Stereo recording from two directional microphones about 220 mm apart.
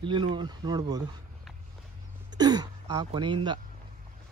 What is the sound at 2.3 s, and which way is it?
Speech, 20° right (ahead or behind).